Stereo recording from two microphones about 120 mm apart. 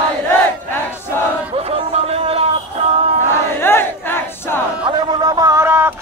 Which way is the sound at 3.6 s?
20° left (ahead or behind).